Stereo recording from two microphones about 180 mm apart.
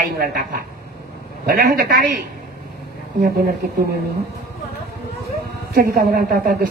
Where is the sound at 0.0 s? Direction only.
55° right (ahead or behind).